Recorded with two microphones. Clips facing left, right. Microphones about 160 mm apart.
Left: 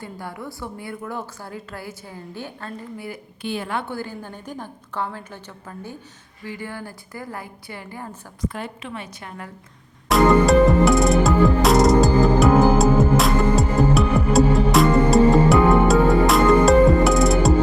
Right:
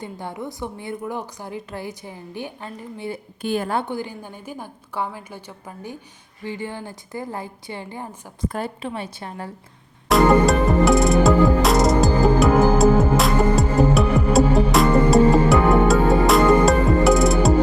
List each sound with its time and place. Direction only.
0.0 s a woman's voice: 20° right (ahead or behind)
3.4 s a woman's voice: 45° right (ahead or behind)
3.8 s a woman's voice: 15° right (ahead or behind)
8.4 s a woman's voice: 35° right (ahead or behind)
10.1 s music: centre (ahead or behind)